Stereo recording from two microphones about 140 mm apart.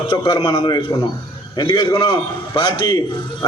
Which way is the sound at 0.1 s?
35° left (ahead or behind).